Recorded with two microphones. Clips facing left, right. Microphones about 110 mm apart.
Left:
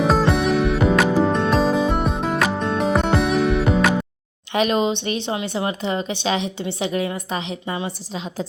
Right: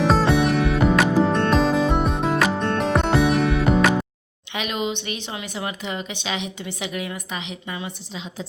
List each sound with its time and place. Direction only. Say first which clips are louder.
0.0 s music: even; centre (ahead or behind)
4.5 s speech: left 7 dB; 35° left (ahead or behind)